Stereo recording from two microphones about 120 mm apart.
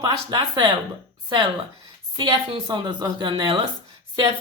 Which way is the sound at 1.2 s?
40° right (ahead or behind).